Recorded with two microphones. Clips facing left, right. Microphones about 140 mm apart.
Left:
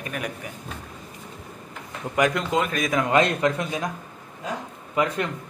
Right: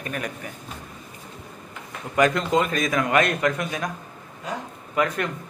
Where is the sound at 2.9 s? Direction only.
25° left (ahead or behind).